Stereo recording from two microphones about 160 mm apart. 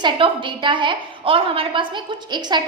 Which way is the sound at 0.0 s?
30° right (ahead or behind).